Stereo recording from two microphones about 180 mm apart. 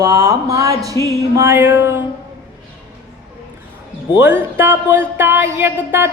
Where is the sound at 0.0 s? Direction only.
15° right (ahead or behind).